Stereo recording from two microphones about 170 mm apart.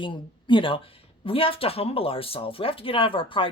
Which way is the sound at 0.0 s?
30° left (ahead or behind).